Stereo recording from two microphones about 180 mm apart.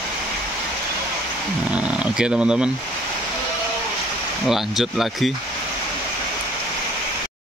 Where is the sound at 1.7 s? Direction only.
5° right (ahead or behind).